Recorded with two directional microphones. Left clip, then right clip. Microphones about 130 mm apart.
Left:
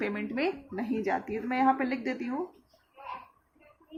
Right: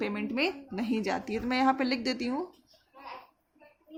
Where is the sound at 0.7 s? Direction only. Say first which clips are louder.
Left 1 dB; 90° right.